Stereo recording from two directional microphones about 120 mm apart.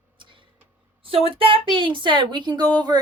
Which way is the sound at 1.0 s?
50° right (ahead or behind).